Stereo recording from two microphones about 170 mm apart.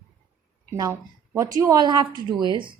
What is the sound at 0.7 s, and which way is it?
A woman's voice, 20° right (ahead or behind).